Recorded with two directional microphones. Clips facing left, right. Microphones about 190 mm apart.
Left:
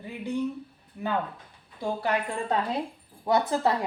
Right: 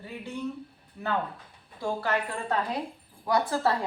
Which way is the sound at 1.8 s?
20° left (ahead or behind).